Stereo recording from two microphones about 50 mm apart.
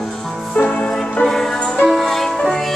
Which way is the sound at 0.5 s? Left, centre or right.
Left.